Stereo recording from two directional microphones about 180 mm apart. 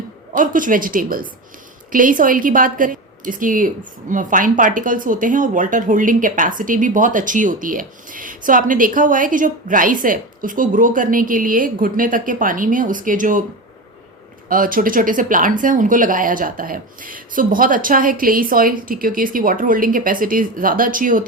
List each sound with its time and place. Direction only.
0.3 s speech: 50° right (ahead or behind)
14.5 s speech: 50° right (ahead or behind)